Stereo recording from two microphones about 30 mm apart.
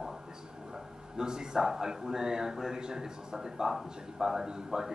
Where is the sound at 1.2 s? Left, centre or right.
Right.